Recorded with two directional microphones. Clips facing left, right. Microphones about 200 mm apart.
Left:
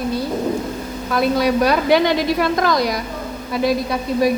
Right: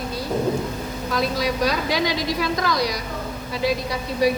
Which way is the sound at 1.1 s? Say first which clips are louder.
Left 7 dB; 55° left (ahead or behind).